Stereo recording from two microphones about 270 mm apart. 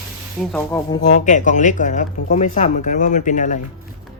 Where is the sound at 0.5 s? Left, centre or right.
Centre.